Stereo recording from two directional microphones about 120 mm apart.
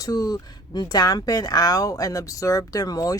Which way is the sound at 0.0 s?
30° left (ahead or behind).